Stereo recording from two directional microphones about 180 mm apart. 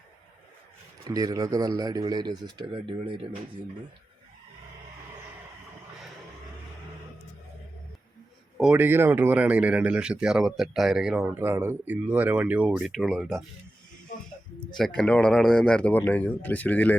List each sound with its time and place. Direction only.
1.0 s speech: 20° right (ahead or behind)
8.5 s speech: 5° right (ahead or behind)
14.6 s speech: centre (ahead or behind)